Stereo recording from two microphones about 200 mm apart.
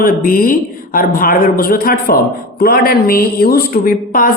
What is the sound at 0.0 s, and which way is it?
A woman's voice, 45° left (ahead or behind).